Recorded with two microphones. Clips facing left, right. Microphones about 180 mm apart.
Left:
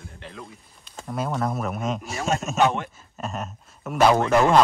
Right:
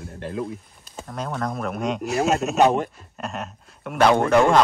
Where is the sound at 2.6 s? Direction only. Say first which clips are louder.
Right 4 dB; 40° right (ahead or behind).